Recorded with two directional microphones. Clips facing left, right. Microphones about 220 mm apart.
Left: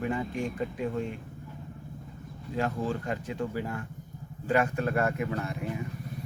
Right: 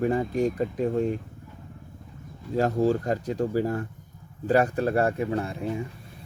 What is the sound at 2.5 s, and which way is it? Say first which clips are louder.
Speech: right 8 dB; 40° right (ahead or behind).